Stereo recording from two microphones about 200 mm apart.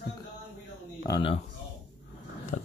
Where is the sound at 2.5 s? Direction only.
45° left (ahead or behind).